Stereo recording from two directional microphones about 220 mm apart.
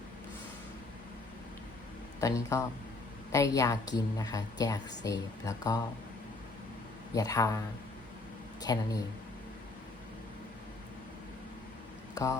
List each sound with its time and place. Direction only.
2.2 s a woman's voice: 15° left (ahead or behind)
7.1 s a woman's voice: 15° left (ahead or behind)
8.6 s a woman's voice: 15° left (ahead or behind)
12.1 s speech: 15° left (ahead or behind)